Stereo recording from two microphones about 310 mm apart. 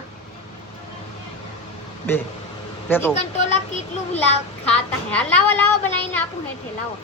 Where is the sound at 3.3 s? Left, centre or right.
Left.